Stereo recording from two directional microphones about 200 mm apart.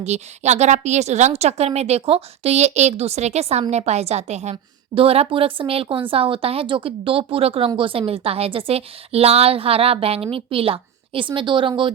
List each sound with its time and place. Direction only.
0.0 s a woman's voice: 35° right (ahead or behind)